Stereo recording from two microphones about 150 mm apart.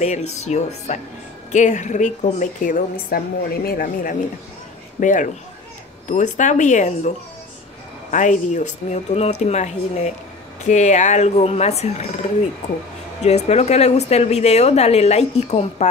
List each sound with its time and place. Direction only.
0.0 s a woman's voice: 45° left (ahead or behind)
13.2 s a woman's voice: 45° left (ahead or behind)